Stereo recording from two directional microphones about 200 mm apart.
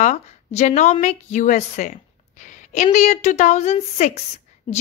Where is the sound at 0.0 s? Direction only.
35° left (ahead or behind).